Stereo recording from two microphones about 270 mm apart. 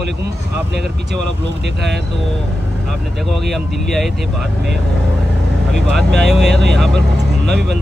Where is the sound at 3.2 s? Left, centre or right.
Centre.